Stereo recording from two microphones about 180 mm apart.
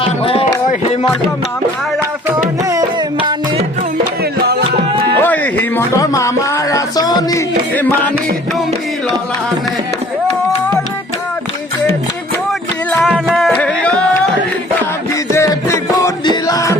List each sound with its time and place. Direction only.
0.2 s speech: 30° left (ahead or behind)
2.0 s music: 15° right (ahead or behind)
4.2 s music: 60° right (ahead or behind)
5.2 s a sound: 10° left (ahead or behind)
7.8 s music: 10° left (ahead or behind)
12.5 s music: centre (ahead or behind)
15.3 s music: 15° left (ahead or behind)